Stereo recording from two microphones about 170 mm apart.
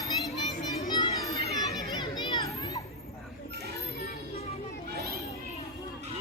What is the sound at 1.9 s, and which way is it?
Children playing, 25° left (ahead or behind).